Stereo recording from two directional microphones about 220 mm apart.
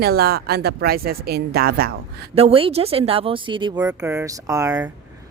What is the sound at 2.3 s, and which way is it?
A woman's voice, 25° right (ahead or behind).